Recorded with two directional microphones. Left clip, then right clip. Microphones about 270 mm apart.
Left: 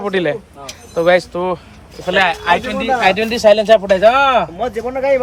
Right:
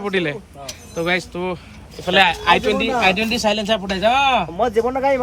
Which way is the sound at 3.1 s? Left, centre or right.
Right.